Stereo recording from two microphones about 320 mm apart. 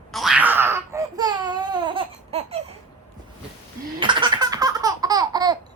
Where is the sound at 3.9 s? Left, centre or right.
Centre.